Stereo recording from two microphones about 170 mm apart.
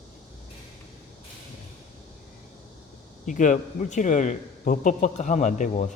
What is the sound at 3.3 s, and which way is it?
A man's voice, 45° left (ahead or behind).